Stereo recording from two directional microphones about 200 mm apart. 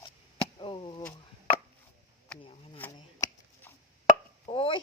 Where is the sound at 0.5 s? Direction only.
25° left (ahead or behind).